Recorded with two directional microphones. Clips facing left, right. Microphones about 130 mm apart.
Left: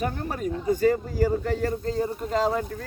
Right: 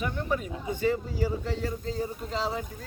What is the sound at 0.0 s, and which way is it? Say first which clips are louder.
Speech: left 2 dB; 45° left (ahead or behind).